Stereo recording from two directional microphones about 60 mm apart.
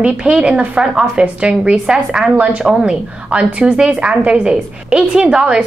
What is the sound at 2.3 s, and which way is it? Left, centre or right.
A woman's voice, right.